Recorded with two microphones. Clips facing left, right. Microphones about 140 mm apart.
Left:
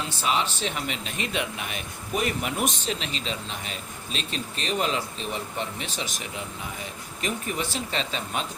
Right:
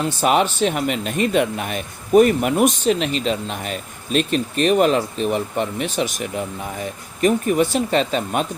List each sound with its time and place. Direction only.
0.0 s speech: 55° right (ahead or behind)